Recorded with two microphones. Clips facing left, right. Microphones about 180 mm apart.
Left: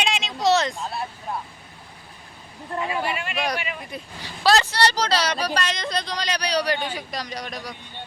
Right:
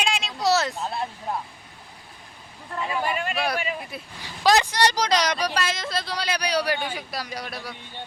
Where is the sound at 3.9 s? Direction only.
5° right (ahead or behind).